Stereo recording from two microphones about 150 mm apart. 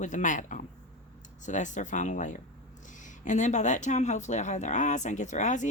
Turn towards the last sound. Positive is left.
turn(degrees=55)  # may be behind; listen again after turning